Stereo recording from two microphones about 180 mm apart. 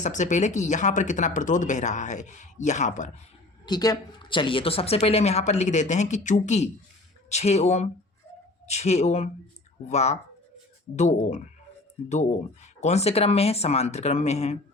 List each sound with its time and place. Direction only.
0.0 s speech: 45° left (ahead or behind)
3.7 s speech: 20° left (ahead or behind); by 14.6 s 35° left (ahead or behind)